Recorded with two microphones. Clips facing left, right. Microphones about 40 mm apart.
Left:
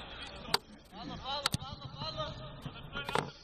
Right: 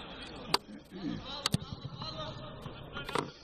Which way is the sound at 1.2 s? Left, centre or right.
Left.